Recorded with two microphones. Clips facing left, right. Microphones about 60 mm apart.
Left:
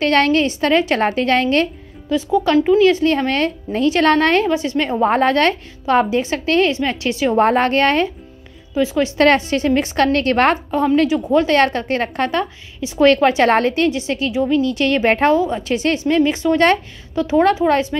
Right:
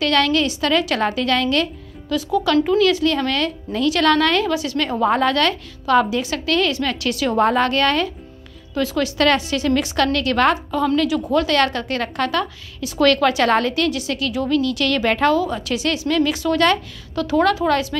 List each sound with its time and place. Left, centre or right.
0.0 s a woman's voice: left
8.7 s a woman's voice: centre
9.2 s a woman's voice: left